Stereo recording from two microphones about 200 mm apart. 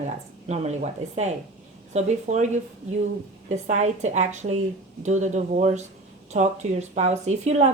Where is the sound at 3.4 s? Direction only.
35° right (ahead or behind).